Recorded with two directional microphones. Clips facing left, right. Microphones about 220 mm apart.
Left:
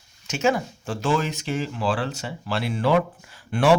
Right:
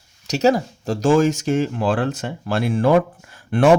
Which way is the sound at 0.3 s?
40° right (ahead or behind).